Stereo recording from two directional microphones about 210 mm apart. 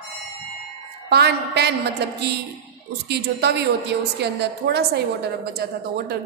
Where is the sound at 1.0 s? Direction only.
50° right (ahead or behind).